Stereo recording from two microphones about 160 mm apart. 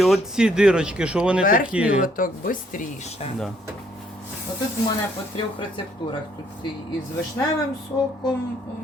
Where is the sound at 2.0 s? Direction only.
60° left (ahead or behind).